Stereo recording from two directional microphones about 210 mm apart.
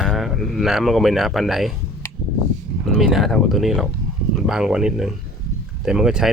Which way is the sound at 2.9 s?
Centre (ahead or behind).